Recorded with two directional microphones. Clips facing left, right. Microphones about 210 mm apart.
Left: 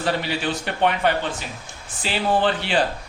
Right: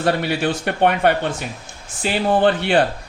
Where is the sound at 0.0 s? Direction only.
55° right (ahead or behind).